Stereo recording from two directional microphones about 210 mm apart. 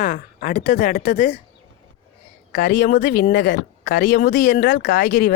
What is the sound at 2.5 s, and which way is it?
Speech, 45° left (ahead or behind).